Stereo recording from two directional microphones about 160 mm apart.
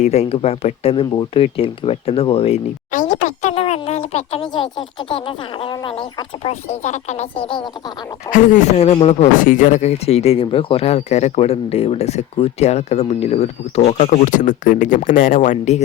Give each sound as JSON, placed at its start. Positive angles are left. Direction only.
{"t": 0.0, "sound": "speech", "side_deg": 40}
{"t": 2.9, "sound": "speech", "side_deg": 55}
{"t": 8.3, "sound": "speech", "side_deg": 55}
{"t": 9.4, "sound": "speech", "side_deg": 55}